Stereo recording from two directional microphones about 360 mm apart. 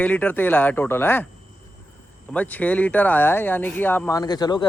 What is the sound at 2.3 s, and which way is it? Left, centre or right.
Speech, centre.